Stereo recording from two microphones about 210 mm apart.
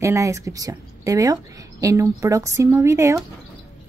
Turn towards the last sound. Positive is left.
turn(degrees=-15)  # may be behind; listen again after turning